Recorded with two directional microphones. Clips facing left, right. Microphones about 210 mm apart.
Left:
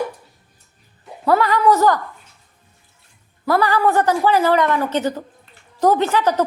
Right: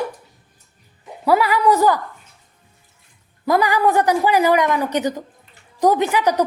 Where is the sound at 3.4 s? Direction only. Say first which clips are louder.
Even; 15° right (ahead or behind).